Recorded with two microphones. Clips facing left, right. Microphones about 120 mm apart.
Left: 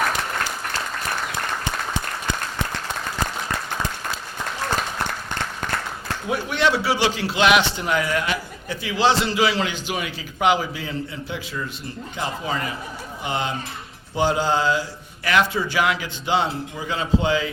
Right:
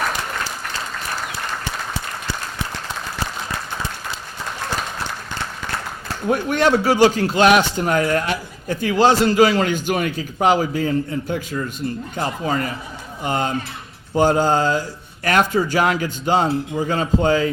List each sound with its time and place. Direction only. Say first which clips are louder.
6.2 s a man's voice: right 4 dB; 45° right (ahead or behind)